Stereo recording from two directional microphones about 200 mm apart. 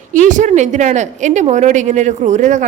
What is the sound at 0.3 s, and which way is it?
A woman's voice, 40° right (ahead or behind).